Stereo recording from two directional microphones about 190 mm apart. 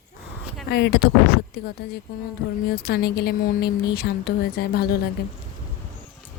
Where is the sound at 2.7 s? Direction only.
55° left (ahead or behind).